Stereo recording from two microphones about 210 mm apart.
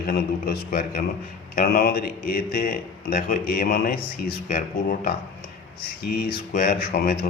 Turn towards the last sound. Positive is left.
turn(degrees=45)  # may be behind; listen again after turning